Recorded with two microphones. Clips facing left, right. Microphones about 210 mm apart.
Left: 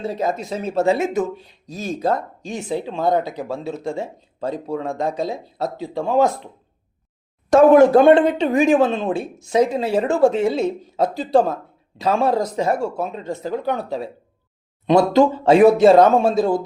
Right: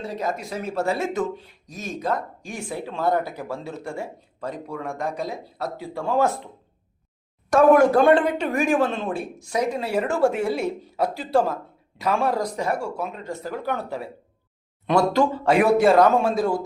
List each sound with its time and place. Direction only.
0.0 s speech: 25° left (ahead or behind)
1.6 s speech: 30° left (ahead or behind)
7.5 s speech: 25° left (ahead or behind)
14.8 s speech: 20° left (ahead or behind)